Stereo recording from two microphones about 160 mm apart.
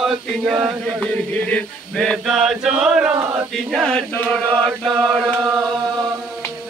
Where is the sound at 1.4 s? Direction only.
5° left (ahead or behind).